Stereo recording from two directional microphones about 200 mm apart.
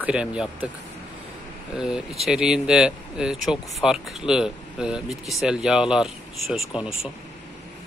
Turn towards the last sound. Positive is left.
turn(degrees=-5)  # may be behind; listen again after turning